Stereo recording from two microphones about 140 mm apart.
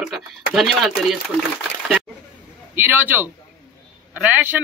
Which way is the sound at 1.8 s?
5° right (ahead or behind).